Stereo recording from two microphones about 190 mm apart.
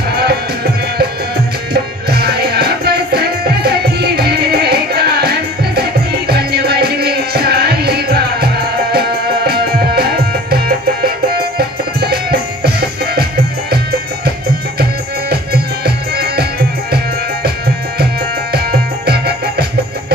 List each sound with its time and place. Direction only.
0.1 s music: 55° right (ahead or behind)
14.8 s music: 55° right (ahead or behind)
18.5 s music: 55° right (ahead or behind)